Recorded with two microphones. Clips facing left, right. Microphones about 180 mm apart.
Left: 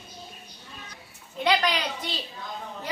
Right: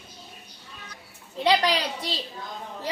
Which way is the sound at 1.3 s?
30° right (ahead or behind).